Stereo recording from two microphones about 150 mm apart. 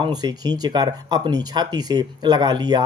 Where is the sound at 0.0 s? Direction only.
25° right (ahead or behind).